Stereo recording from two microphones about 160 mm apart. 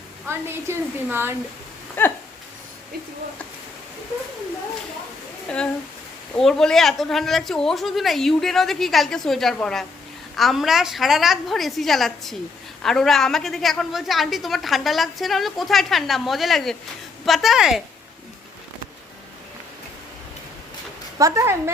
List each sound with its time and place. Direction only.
0.3 s a woman's voice: 15° right (ahead or behind)
2.0 s speech: 10° left (ahead or behind)
5.5 s a woman's voice: 5° left (ahead or behind)
21.2 s speech: 20° right (ahead or behind)